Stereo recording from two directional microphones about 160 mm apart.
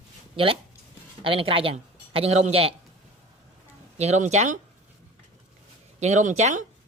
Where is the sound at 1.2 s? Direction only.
35° right (ahead or behind).